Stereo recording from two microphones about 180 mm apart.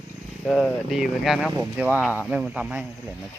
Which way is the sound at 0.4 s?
Centre (ahead or behind).